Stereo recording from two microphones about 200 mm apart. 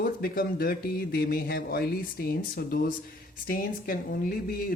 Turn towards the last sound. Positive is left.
turn(degrees=45)  # may be behind; listen again after turning